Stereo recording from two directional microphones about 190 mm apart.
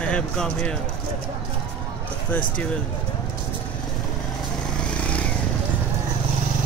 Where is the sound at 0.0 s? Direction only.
5° left (ahead or behind).